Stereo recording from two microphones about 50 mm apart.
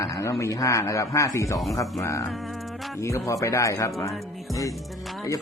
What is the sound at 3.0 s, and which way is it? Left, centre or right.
Speech, left.